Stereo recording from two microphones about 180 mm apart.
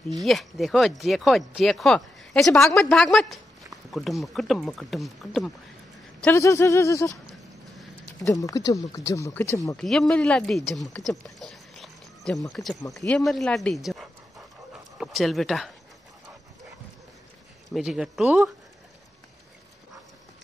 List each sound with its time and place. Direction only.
0.2 s speech: centre (ahead or behind)
6.2 s speech: 15° left (ahead or behind)
8.2 s speech: 20° left (ahead or behind)
9.8 s speech: 5° left (ahead or behind)
17.6 s speech: centre (ahead or behind)